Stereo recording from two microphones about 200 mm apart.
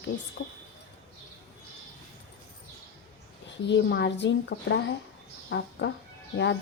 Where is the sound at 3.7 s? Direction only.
60° left (ahead or behind).